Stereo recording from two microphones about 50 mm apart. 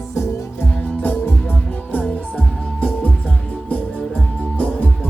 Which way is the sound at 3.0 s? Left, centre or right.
Left.